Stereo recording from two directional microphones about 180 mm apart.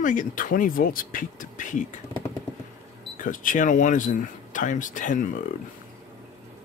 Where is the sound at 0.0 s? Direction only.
45° left (ahead or behind).